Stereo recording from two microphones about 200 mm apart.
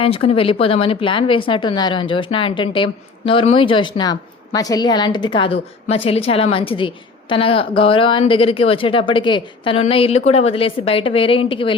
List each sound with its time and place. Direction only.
0.0 s speech: 30° left (ahead or behind)